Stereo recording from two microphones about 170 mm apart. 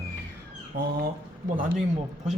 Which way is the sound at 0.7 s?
75° right (ahead or behind).